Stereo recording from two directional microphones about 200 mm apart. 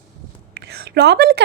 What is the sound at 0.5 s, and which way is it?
Speech, 55° right (ahead or behind).